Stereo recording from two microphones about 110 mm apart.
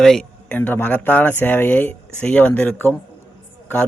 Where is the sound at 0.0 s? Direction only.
5° left (ahead or behind).